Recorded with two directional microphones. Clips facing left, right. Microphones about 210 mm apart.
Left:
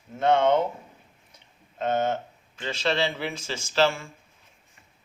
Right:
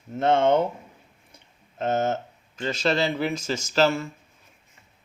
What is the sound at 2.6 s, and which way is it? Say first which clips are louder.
Speech: right 2 dB; 40° right (ahead or behind).